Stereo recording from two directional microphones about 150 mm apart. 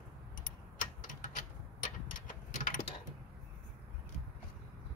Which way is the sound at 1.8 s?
65° left (ahead or behind).